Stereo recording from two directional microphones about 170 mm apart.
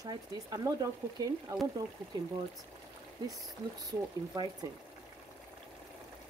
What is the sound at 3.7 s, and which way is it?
Speech, 20° right (ahead or behind).